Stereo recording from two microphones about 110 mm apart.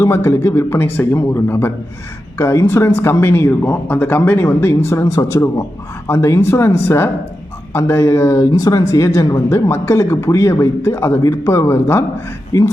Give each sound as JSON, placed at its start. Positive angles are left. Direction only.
{"t": 0.0, "sound": "speech", "side_deg": 25}